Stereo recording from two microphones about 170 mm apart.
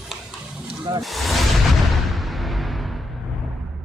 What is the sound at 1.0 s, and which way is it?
Speech, centre (ahead or behind).